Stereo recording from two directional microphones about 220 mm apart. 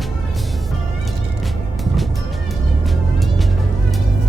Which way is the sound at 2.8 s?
Centre (ahead or behind).